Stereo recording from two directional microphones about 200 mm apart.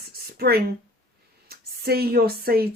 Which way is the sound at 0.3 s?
50° right (ahead or behind).